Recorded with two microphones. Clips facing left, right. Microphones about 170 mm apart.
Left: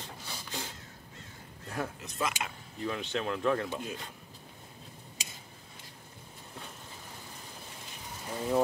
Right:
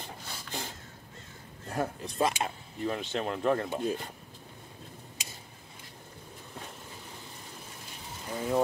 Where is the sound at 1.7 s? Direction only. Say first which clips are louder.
Right 4 dB; 35° right (ahead or behind).